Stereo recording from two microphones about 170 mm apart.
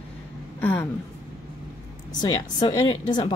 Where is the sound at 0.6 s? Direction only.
10° left (ahead or behind).